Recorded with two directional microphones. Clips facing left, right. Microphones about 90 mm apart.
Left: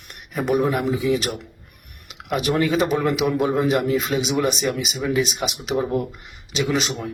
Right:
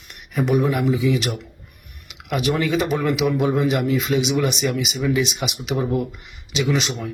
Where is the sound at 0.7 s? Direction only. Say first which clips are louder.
Right 1 dB; 35° left (ahead or behind).